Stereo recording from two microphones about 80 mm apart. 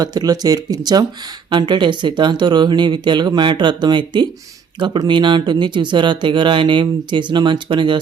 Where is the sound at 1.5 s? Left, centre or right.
Right.